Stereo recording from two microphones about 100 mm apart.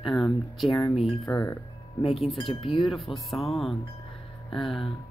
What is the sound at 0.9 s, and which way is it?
Speech, 85° left.